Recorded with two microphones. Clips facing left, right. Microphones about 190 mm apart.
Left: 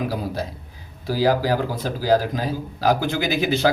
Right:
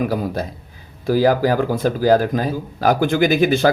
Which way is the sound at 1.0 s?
50° right (ahead or behind).